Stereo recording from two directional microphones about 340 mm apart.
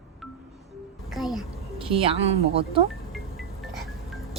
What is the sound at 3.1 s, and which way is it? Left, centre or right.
Music, centre.